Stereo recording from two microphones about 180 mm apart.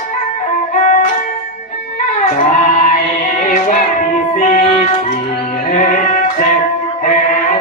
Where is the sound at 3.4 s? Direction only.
45° left (ahead or behind).